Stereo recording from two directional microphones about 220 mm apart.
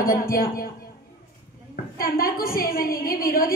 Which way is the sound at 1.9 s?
40° left (ahead or behind).